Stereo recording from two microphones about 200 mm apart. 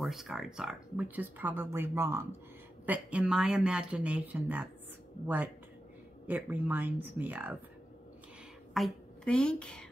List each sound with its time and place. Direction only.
0.0 s speech: centre (ahead or behind)
8.7 s a woman's voice: 5° left (ahead or behind)